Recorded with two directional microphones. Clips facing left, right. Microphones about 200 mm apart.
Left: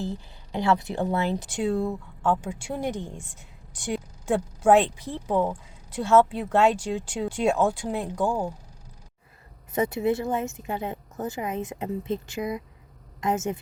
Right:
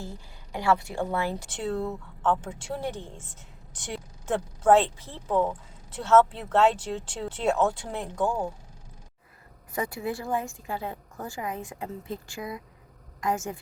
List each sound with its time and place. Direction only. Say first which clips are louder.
0.0 s a woman's voice: left 8 dB; 20° left (ahead or behind)
9.7 s speech: left 7 dB; 20° left (ahead or behind)